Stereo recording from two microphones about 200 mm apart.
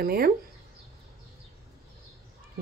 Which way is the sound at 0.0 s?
50° right (ahead or behind).